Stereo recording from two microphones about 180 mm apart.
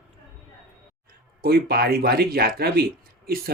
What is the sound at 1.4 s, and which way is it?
Speech, 60° right (ahead or behind).